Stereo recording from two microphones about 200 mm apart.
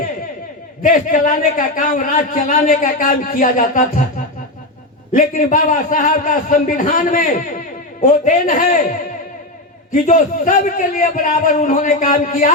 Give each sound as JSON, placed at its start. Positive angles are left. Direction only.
{"t": 0.8, "sound": "a man's voice", "side_deg": 40}
{"t": 5.1, "sound": "a man's voice", "side_deg": 40}
{"t": 9.9, "sound": "a man's voice", "side_deg": 40}